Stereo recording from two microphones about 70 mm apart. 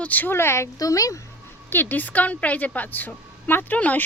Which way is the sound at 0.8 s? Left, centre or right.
Left.